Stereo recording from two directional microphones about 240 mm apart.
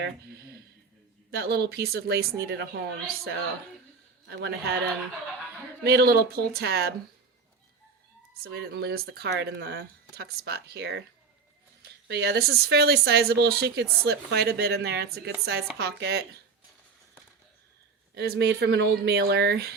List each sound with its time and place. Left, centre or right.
1.3 s a woman's voice: right
5.8 s a woman's voice: right
8.4 s speech: right
12.0 s speech: right
18.1 s speech: right